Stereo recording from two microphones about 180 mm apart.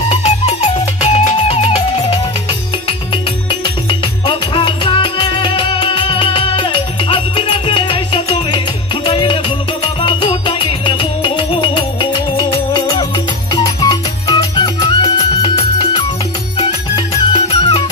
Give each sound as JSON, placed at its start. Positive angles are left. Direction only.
{"t": 1.0, "sound": "music", "side_deg": 30}
{"t": 4.3, "sound": "music", "side_deg": 25}
{"t": 17.3, "sound": "music", "side_deg": 30}